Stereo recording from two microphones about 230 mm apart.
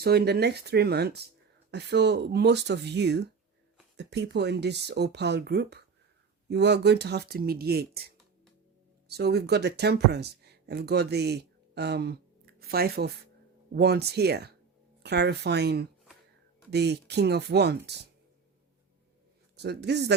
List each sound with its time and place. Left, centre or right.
0.0 s speech: right
9.0 s speech: right
19.6 s speech: right